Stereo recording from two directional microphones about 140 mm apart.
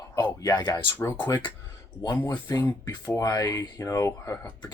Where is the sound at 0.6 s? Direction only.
30° left (ahead or behind).